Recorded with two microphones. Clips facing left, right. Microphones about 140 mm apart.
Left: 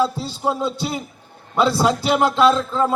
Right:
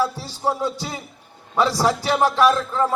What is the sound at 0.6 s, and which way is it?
Speech, 15° left (ahead or behind).